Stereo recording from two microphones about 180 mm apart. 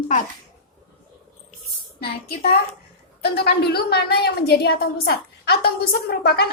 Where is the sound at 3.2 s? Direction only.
60° left (ahead or behind).